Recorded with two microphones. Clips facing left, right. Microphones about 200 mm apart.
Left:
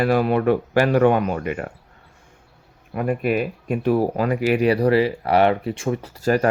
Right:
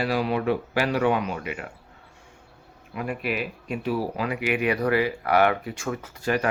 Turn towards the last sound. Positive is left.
turn(degrees=40)  # may be behind; listen again after turning